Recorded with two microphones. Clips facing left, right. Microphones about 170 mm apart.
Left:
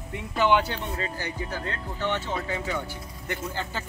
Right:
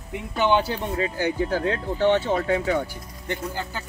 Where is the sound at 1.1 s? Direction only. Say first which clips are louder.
Right 9 dB; 65° right (ahead or behind).